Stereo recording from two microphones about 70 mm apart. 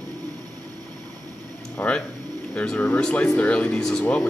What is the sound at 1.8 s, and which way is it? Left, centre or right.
Speech, left.